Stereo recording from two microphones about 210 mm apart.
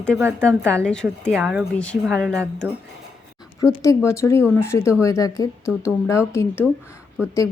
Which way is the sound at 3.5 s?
15° left (ahead or behind).